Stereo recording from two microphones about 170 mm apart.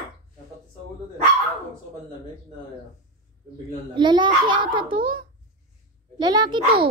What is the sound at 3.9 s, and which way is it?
A child's voice, 25° right (ahead or behind).